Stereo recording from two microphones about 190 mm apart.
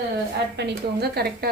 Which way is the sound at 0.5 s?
60° right (ahead or behind).